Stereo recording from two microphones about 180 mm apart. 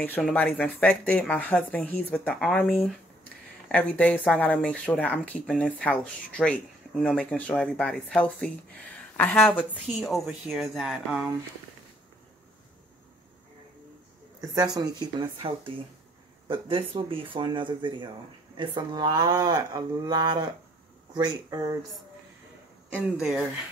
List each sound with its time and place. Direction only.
0.2 s speech: 5° left (ahead or behind)
14.5 s speech: 20° right (ahead or behind)
22.9 s speech: 15° left (ahead or behind)